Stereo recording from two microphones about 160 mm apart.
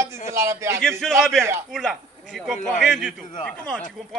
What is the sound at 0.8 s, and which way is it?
A man's voice, 5° left (ahead or behind).